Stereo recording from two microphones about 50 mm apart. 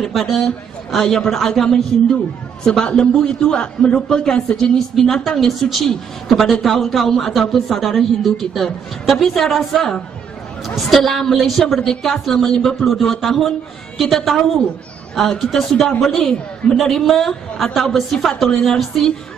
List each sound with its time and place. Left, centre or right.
0.0 s a woman's voice: centre